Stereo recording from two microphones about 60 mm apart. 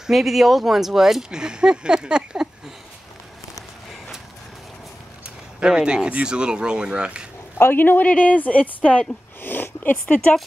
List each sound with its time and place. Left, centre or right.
0.0 s speech: centre
5.6 s speech: centre
7.5 s speech: left